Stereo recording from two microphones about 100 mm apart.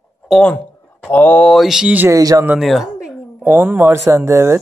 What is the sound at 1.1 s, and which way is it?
Speech, 15° left (ahead or behind).